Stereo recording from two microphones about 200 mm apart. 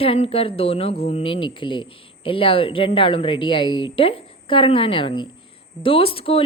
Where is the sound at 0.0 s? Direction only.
30° left (ahead or behind).